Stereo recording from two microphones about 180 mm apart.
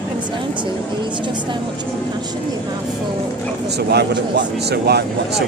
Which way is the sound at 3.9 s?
70° right (ahead or behind).